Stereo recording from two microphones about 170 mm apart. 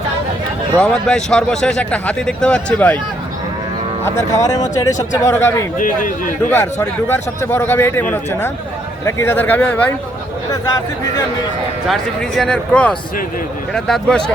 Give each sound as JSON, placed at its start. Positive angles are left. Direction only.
{"t": 0.8, "sound": "speech", "side_deg": 5}
{"t": 4.0, "sound": "a man's voice", "side_deg": 15}
{"t": 5.7, "sound": "a man's voice", "side_deg": 50}
{"t": 6.5, "sound": "a man's voice", "side_deg": 15}
{"t": 10.5, "sound": "speech", "side_deg": 20}
{"t": 12.4, "sound": "speech", "side_deg": 5}